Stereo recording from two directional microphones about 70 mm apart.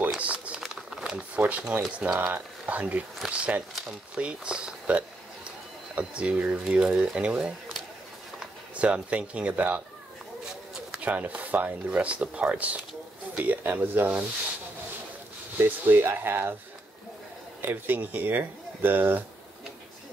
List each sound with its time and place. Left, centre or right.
0.2 s a sound: centre
0.6 s a sound: centre
1.3 s speech: right
8.7 s speech: centre
10.5 s bird: centre
11.0 s speech: right
15.5 s speech: right
17.6 s speech: right